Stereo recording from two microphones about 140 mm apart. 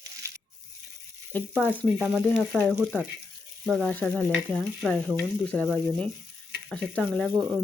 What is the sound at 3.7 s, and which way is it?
Stir, centre (ahead or behind).